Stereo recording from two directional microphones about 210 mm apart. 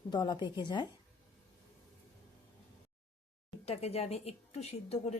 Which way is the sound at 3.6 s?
30° left (ahead or behind).